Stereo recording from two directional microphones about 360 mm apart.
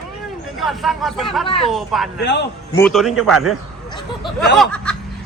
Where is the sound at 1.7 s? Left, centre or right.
Centre.